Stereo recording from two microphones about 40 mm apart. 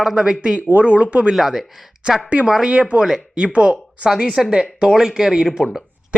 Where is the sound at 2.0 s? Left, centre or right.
Right.